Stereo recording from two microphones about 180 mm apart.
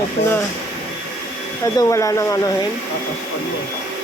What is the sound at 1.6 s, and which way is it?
Speech, 15° left (ahead or behind).